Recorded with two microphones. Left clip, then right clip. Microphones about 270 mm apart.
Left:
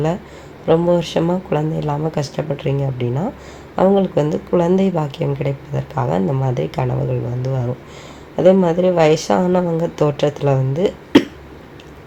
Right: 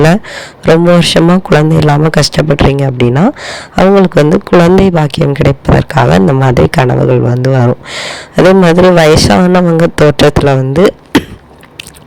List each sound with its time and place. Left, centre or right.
0.0 s speech: right